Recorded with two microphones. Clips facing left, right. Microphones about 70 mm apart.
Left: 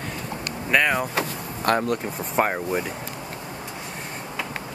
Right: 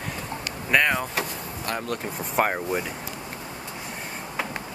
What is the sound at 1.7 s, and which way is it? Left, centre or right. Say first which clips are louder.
Speech: left 9 dB; left.